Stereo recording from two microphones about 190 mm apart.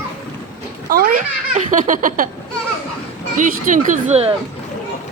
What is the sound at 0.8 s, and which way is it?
A child's voice, 50° right (ahead or behind).